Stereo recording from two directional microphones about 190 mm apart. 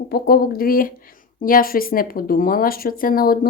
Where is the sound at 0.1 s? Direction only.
55° left (ahead or behind).